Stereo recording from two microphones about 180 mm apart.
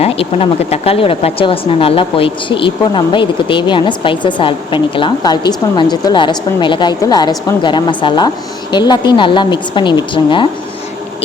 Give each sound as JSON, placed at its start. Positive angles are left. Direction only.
{"t": 0.0, "sound": "speech", "side_deg": 35}